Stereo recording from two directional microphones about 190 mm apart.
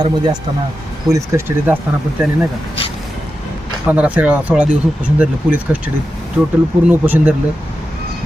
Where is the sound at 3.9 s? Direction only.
10° right (ahead or behind).